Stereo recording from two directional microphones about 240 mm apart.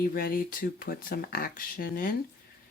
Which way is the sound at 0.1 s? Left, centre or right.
Left.